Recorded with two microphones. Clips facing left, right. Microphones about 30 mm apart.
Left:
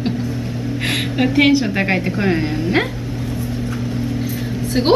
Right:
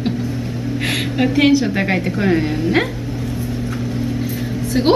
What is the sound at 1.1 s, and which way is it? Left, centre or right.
A woman's voice, centre.